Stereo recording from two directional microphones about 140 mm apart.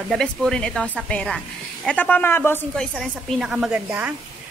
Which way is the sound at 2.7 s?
5° left (ahead or behind).